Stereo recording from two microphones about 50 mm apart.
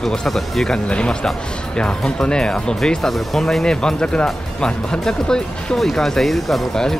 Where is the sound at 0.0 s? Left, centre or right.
Centre.